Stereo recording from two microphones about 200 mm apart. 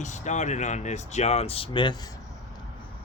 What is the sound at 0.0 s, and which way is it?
Speech, 35° left (ahead or behind).